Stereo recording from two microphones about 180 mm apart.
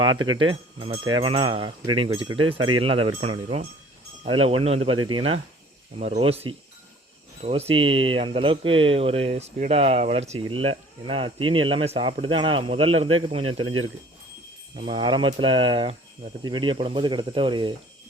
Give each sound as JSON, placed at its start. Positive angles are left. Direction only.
{"t": 0.0, "sound": "speech", "side_deg": -25}